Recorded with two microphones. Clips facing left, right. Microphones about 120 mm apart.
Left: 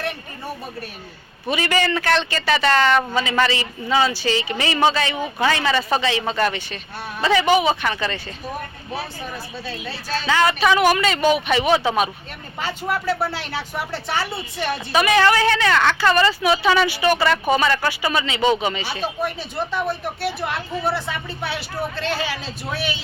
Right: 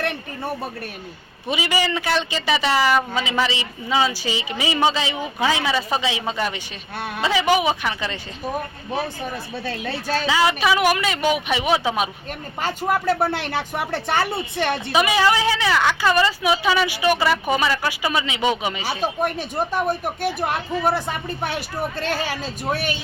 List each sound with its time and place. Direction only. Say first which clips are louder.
1.5 s speech: left 2 dB; 15° right (ahead or behind)
10.2 s speech: left 2 dB; 10° right (ahead or behind)
12.5 s speech: right 2 dB; 45° right (ahead or behind)
14.9 s speech: left 2 dB; 10° right (ahead or behind)
19.2 s speech: right 2 dB; 50° right (ahead or behind)